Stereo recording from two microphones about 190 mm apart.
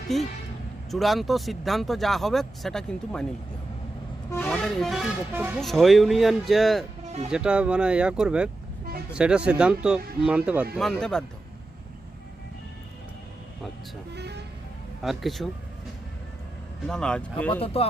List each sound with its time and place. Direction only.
0.1 s speech: centre (ahead or behind)
4.3 s speech: 10° left (ahead or behind); by 5.5 s 10° right (ahead or behind)
5.5 s speech: centre (ahead or behind)
14.1 s speech: 60° right (ahead or behind)
15.0 s speech: centre (ahead or behind)
16.8 s speech: 5° left (ahead or behind)
17.5 s speech: 30° left (ahead or behind)